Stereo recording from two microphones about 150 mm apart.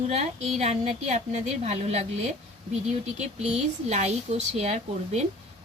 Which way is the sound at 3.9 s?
50° right (ahead or behind).